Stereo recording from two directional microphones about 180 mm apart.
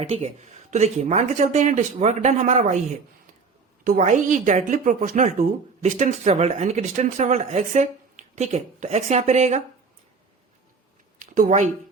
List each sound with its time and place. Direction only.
0.0 s a woman's voice: 35° right (ahead or behind)
3.8 s a woman's voice: 45° right (ahead or behind)
11.2 s speech: 45° right (ahead or behind)